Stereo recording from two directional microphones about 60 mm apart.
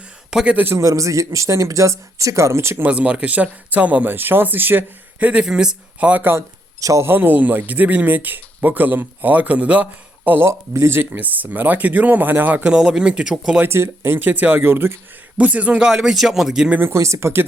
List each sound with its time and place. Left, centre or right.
0.3 s a man's voice: centre
0.8 s speech: right
2.8 s speech: right
5.2 s speech: centre
6.7 s speech: right
7.0 s speech: right
10.3 s speech: right
12.7 s speech: centre
13.7 s speech: right
14.2 s speech: right
15.4 s speech: right
15.9 s speech: centre
16.8 s speech: right